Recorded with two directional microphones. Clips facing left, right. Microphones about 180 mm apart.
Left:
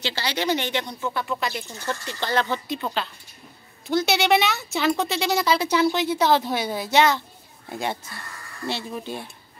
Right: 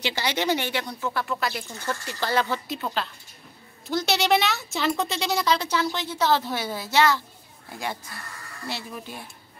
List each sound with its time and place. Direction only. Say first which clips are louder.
0.0 s speech: even; 15° right (ahead or behind); by 9.2 s 30° left (ahead or behind)